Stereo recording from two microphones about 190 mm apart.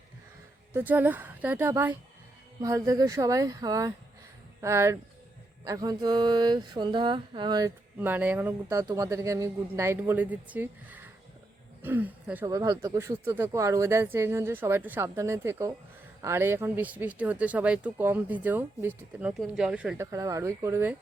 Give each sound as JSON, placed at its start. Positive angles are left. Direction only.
{"t": 0.7, "sound": "speech", "side_deg": -10}
{"t": 5.6, "sound": "a sound", "side_deg": -20}
{"t": 7.9, "sound": "speech", "side_deg": -10}